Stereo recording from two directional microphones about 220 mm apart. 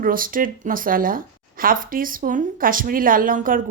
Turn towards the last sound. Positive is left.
turn(degrees=-40)  # may be behind; listen again after turning